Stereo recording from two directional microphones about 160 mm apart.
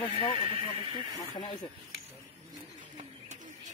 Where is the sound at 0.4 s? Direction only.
35° right (ahead or behind).